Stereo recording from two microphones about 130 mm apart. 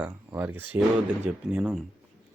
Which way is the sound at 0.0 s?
10° right (ahead or behind).